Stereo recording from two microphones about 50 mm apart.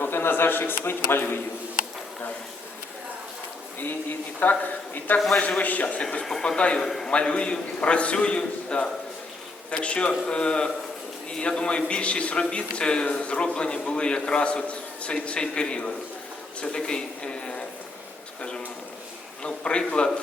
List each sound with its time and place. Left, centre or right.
0.0 s a man's voice: left
4.4 s a man's voice: left
6.7 s speech: centre
7.1 s a man's voice: left
19.4 s a man's voice: centre